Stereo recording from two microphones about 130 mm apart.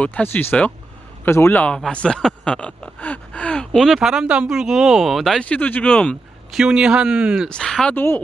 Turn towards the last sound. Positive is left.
turn(degrees=5)  # may be behind; listen again after turning